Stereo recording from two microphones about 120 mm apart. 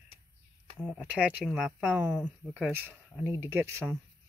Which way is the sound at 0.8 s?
10° right (ahead or behind).